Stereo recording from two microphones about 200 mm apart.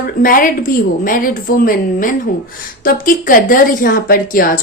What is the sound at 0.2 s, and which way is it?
Speech, 45° left (ahead or behind).